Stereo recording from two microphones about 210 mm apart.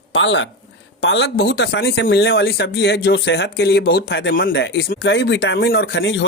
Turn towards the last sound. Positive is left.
turn(degrees=60)  # may be behind; listen again after turning